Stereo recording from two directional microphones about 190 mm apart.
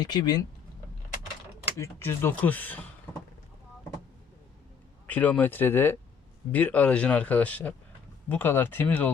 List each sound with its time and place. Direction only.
0.0 s speech: 20° left (ahead or behind)
1.8 s speech: 10° left (ahead or behind)
5.0 s speech: 10° left (ahead or behind)